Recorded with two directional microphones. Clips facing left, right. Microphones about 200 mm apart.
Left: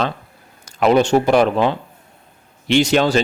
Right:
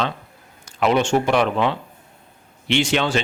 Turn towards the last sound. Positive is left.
turn(degrees=40)  # may be behind; listen again after turning